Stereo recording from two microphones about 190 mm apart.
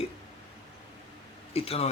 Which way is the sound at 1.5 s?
30° left (ahead or behind).